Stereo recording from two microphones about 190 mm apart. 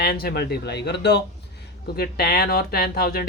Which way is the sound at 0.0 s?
55° left (ahead or behind).